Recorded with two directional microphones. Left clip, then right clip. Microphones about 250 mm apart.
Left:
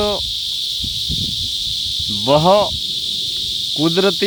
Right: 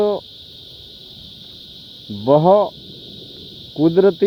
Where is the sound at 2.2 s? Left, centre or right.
Left.